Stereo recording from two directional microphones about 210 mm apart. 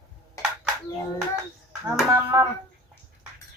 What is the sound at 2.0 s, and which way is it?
Speech, 15° right (ahead or behind).